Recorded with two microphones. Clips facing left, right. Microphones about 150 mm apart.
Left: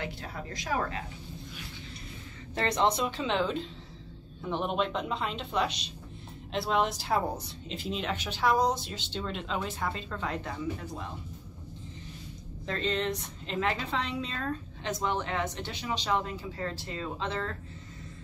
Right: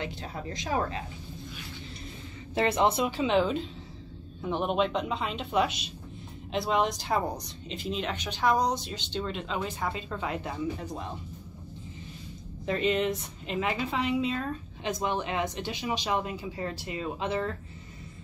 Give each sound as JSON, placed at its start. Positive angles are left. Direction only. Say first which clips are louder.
{"t": 0.0, "sound": "a woman's voice", "louder": "right 2 dB", "side_deg": -25}
{"t": 2.5, "sound": "a woman's voice", "louder": "right 2 dB", "side_deg": -10}
{"t": 12.6, "sound": "a woman's voice", "louder": "right 4 dB", "side_deg": -10}